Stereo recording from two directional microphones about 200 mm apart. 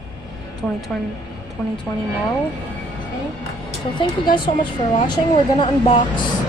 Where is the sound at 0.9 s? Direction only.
5° left (ahead or behind).